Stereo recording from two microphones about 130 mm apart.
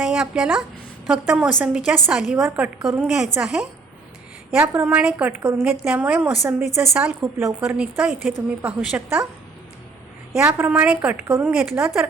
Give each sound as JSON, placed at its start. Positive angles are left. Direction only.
{"t": 0.0, "sound": "a woman's voice", "side_deg": -5}
{"t": 4.5, "sound": "a woman's voice", "side_deg": -20}
{"t": 10.4, "sound": "a woman's voice", "side_deg": -15}